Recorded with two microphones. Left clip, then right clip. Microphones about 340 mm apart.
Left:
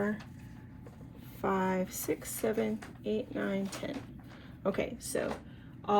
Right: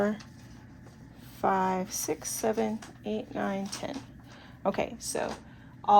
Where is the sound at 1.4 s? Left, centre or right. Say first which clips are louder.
Right 5 dB; right.